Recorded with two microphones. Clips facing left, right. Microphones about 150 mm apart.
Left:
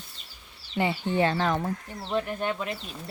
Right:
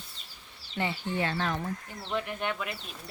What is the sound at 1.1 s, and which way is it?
Speech, 30° left (ahead or behind).